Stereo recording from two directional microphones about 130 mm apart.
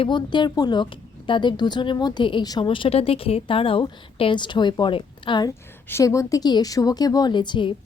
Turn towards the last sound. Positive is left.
turn(degrees=35)  # may be behind; listen again after turning